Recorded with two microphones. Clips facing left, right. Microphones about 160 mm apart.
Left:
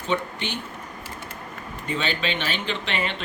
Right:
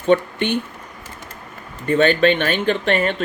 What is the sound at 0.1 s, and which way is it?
Speech, 55° right (ahead or behind).